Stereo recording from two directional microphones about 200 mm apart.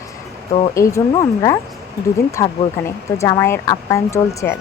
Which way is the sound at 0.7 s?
15° left (ahead or behind).